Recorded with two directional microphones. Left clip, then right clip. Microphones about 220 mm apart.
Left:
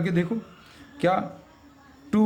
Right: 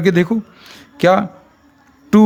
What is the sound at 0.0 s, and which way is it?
A man's voice, 45° right (ahead or behind).